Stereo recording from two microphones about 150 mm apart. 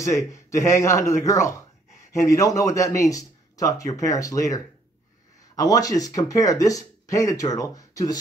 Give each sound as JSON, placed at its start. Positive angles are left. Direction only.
{"t": 0.0, "sound": "speech", "side_deg": 20}
{"t": 5.6, "sound": "speech", "side_deg": 25}